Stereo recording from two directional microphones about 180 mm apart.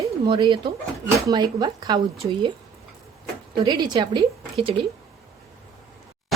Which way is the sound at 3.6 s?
25° right (ahead or behind).